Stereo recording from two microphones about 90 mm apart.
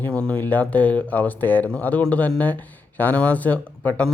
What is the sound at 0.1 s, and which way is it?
Speech, 15° left (ahead or behind).